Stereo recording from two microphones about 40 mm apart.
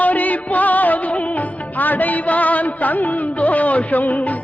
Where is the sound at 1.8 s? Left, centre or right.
Left.